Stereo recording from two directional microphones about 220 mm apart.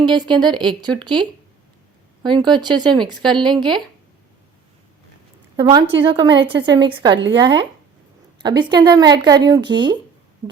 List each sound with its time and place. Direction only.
0.0 s a woman's voice: 20° right (ahead or behind)
5.5 s a woman's voice: 20° right (ahead or behind)
10.4 s a sound: 15° right (ahead or behind)